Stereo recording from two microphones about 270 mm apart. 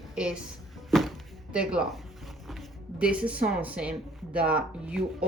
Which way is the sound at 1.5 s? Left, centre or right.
Centre.